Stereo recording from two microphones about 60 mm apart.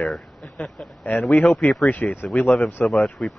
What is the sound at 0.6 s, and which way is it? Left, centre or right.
Speech, left.